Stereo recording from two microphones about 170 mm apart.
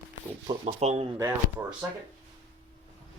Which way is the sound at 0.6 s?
40° right (ahead or behind).